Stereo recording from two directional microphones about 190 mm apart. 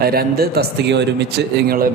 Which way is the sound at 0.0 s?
55° right (ahead or behind).